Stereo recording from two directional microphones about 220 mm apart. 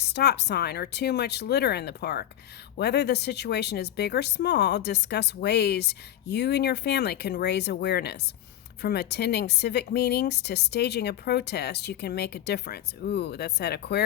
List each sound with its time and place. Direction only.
0.0 s speech: 50° left (ahead or behind)